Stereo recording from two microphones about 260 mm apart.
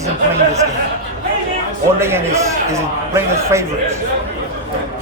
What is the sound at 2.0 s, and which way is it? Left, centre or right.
A man's voice, centre.